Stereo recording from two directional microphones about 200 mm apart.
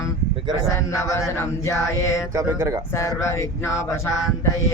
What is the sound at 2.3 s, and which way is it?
Speech, 15° right (ahead or behind).